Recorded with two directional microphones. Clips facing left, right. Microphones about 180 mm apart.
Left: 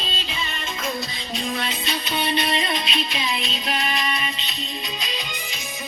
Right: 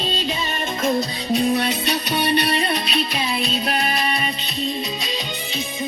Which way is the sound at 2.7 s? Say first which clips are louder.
Right 4 dB; 40° right (ahead or behind).